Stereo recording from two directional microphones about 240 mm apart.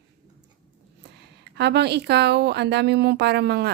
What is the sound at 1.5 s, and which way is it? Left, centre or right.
Speech, right.